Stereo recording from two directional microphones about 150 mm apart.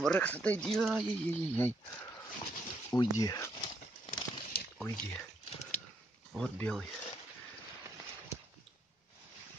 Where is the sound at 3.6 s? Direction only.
35° left (ahead or behind).